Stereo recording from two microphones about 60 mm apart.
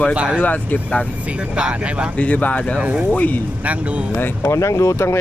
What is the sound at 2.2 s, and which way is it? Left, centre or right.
Speech, left.